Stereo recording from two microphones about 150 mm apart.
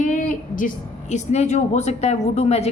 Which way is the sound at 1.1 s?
50° left (ahead or behind).